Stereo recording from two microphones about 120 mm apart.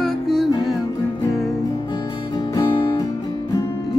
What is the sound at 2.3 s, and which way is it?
Music, 35° left (ahead or behind).